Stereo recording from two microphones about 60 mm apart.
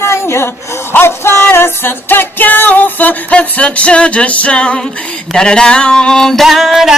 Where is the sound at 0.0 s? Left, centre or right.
Left.